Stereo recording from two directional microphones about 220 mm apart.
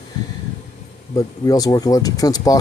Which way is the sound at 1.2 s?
15° left (ahead or behind).